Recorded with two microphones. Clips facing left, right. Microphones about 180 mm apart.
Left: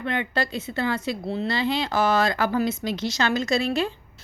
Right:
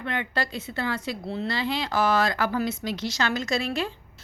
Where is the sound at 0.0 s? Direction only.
25° left (ahead or behind).